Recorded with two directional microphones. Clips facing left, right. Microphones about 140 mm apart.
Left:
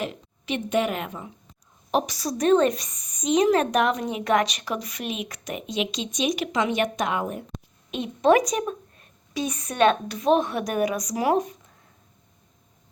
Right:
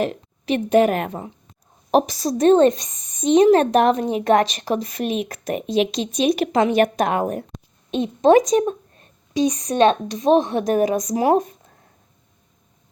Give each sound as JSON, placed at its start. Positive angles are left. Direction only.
{"t": 0.0, "sound": "a woman's voice", "side_deg": -40}
{"t": 2.1, "sound": "a woman's voice", "side_deg": -25}
{"t": 4.2, "sound": "speech", "side_deg": -45}
{"t": 7.9, "sound": "a woman's voice", "side_deg": -30}